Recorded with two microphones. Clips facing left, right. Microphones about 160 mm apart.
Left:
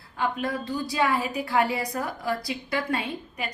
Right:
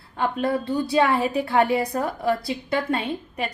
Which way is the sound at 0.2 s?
30° right (ahead or behind).